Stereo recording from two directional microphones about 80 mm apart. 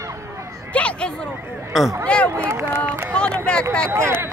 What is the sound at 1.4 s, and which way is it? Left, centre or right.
Speech, right.